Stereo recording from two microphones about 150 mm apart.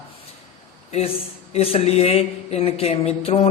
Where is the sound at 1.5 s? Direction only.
45° left (ahead or behind).